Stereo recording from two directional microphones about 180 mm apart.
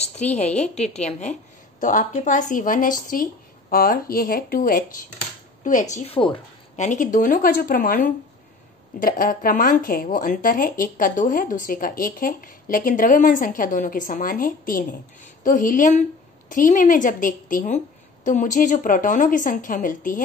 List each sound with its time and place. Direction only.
0.0 s a woman's voice: 40° left (ahead or behind)
6.9 s speech: 45° left (ahead or behind)